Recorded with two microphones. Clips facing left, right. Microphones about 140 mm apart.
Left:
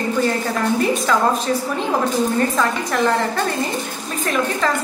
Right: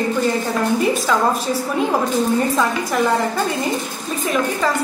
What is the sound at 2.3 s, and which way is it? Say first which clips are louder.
Speech: right 1 dB; 10° right (ahead or behind).